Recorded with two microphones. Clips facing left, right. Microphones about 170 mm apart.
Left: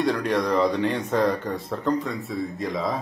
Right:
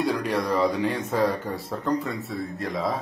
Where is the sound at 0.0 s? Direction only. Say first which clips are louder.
Left 2 dB; centre (ahead or behind).